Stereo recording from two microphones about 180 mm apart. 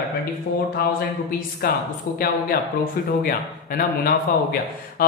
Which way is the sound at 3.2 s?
55° left (ahead or behind).